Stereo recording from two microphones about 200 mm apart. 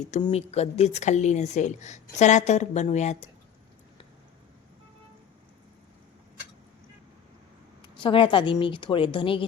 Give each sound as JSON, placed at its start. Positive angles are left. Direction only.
{"t": 0.0, "sound": "speech", "side_deg": 30}
{"t": 7.8, "sound": "speech", "side_deg": 25}